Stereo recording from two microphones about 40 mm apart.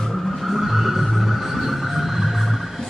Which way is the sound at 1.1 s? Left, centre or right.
Centre.